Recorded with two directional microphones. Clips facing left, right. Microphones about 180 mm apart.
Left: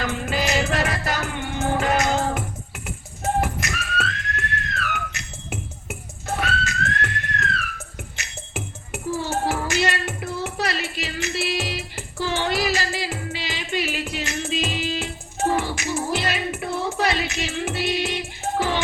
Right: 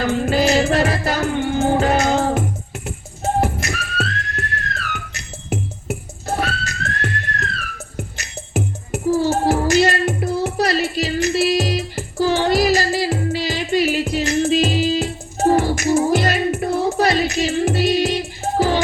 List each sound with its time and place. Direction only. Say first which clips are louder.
0.0 s music: right 8 dB; 30° right (ahead or behind)